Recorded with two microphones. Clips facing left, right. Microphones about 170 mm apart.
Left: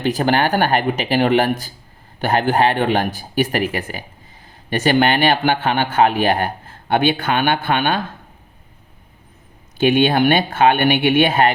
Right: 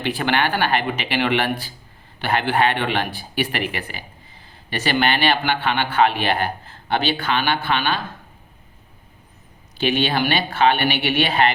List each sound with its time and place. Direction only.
0.0 s a man's voice: 40° left (ahead or behind)
9.7 s a man's voice: 50° left (ahead or behind)